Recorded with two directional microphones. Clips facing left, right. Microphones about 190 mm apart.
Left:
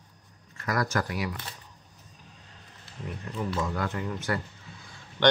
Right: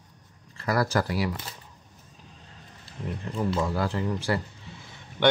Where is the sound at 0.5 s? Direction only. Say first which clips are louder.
Right 3 dB; 30° right (ahead or behind).